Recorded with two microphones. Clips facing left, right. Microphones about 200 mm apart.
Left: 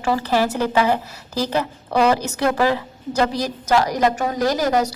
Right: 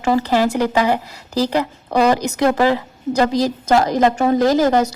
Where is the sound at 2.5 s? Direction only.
15° right (ahead or behind).